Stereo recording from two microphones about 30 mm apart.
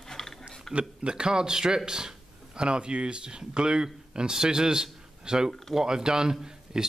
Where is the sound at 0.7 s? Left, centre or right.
Right.